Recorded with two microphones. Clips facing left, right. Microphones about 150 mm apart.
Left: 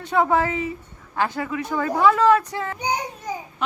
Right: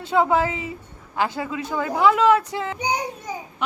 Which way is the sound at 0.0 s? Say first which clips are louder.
Right 1 dB; 25° right (ahead or behind).